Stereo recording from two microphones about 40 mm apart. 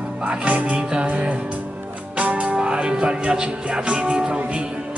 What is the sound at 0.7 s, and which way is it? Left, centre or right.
Music, right.